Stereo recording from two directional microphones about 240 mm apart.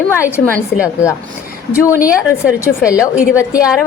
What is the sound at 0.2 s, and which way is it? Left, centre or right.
Speech, centre.